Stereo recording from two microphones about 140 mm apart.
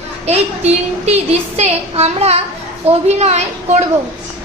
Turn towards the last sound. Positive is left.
turn(degrees=-50)  # may be behind; listen again after turning